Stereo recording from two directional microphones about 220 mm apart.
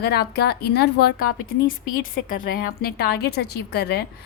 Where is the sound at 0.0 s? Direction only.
50° left (ahead or behind).